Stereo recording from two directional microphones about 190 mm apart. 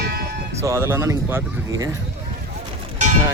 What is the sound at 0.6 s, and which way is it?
Speech, 15° right (ahead or behind).